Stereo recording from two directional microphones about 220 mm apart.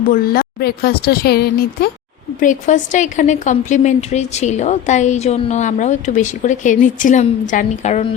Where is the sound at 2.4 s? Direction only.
35° left (ahead or behind).